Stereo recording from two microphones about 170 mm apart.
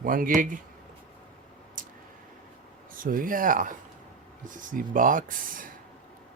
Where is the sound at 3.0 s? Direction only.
55° right (ahead or behind).